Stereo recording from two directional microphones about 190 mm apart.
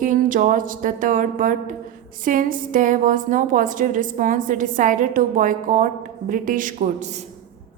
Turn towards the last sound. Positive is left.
turn(degrees=-40)  # may be behind; listen again after turning